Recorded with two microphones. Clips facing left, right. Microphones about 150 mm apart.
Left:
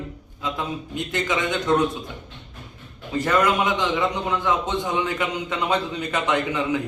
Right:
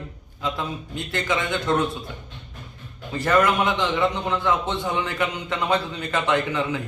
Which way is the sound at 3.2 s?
15° left (ahead or behind).